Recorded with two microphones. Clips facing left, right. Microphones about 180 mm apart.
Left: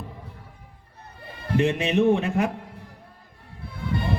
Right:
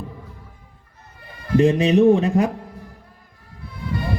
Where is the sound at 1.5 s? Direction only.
35° right (ahead or behind).